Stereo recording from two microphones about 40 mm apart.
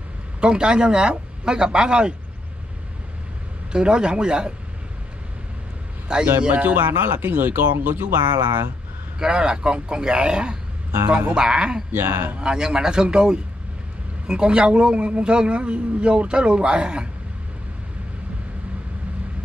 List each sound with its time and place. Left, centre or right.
0.4 s a man's voice: right
3.7 s a man's voice: right
6.1 s a man's voice: centre
6.5 s speech: right
6.9 s speech: right
9.2 s a man's voice: right
11.1 s speech: right
11.3 s speech: centre
11.9 s speech: right
12.4 s a man's voice: centre